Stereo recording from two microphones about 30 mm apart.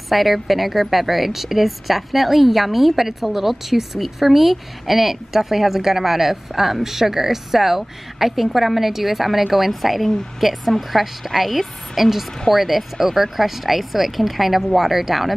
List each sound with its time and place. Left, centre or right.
0.1 s a woman's voice: centre